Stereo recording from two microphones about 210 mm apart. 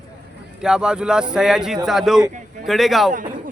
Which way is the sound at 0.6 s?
5° right (ahead or behind).